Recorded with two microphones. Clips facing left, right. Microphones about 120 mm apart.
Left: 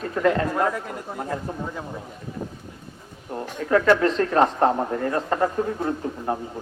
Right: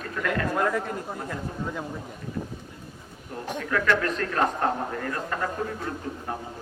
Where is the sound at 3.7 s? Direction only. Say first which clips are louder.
Left 7 dB; 30° left (ahead or behind).